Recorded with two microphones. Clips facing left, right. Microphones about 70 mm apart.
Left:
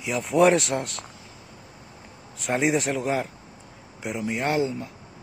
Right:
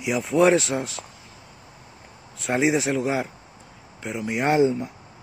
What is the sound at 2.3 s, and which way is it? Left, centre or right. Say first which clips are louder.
Speech: right 2 dB; centre.